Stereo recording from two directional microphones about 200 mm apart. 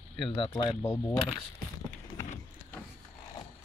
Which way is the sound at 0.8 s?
10° left (ahead or behind).